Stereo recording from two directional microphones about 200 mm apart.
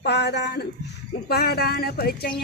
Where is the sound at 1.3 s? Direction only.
50° left (ahead or behind).